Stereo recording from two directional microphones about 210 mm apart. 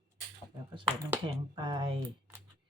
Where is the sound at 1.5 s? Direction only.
20° right (ahead or behind).